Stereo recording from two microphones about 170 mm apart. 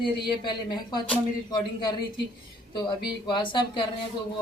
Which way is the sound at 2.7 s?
25° left (ahead or behind).